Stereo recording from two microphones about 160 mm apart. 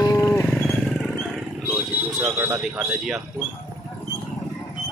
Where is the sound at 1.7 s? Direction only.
10° right (ahead or behind).